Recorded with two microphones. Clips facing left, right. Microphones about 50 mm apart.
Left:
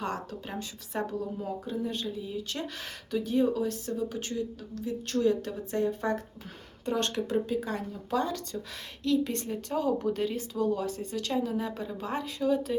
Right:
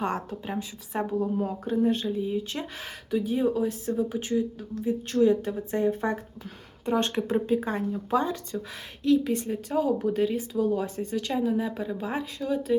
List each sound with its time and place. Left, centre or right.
0.0 s speech: right
0.4 s speech: centre
1.4 s speech: right; by 8.6 s centre
9.0 s speech: centre
10.8 s speech: right
11.3 s speech: centre